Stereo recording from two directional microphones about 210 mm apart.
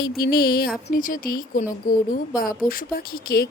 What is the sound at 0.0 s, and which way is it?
A woman's voice, 45° left (ahead or behind).